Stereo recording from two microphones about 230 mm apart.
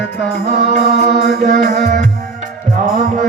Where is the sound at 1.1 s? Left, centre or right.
Right.